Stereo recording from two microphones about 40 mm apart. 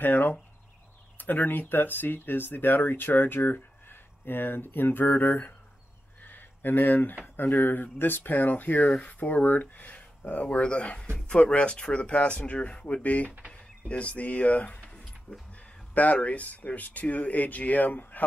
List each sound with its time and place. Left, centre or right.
0.0 s speech: left
6.2 s a sound: left
7.3 s speech: left